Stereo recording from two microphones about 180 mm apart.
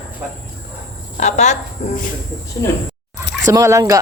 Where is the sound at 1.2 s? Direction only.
40° left (ahead or behind).